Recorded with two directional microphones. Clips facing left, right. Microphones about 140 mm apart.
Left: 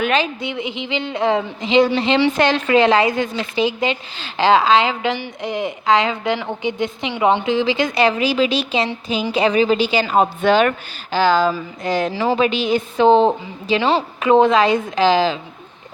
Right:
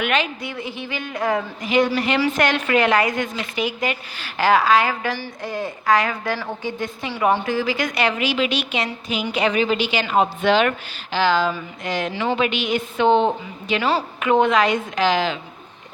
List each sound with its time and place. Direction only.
0.0 s a woman's voice: 30° left (ahead or behind)
0.5 s a woman's voice: 20° left (ahead or behind)